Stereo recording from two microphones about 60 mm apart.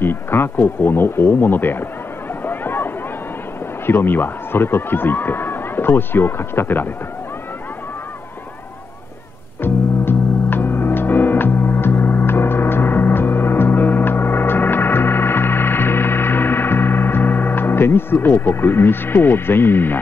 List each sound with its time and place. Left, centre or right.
0.0 s speech: left
2.4 s a sound: left
3.8 s speech: left
9.6 s music: left